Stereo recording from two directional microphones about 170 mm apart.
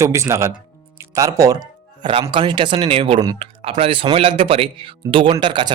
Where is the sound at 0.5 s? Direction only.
20° right (ahead or behind).